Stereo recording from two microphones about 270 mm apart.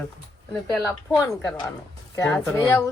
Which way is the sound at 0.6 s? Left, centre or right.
Centre.